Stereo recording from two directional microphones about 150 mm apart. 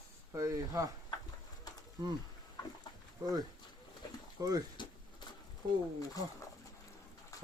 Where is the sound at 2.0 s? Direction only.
30° right (ahead or behind).